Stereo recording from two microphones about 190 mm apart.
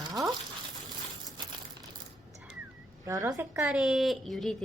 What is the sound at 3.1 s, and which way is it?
Speech, 15° right (ahead or behind).